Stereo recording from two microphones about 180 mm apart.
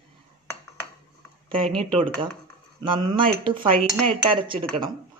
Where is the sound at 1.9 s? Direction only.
30° right (ahead or behind).